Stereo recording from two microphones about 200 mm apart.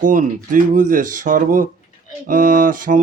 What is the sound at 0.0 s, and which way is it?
Speech, 40° right (ahead or behind).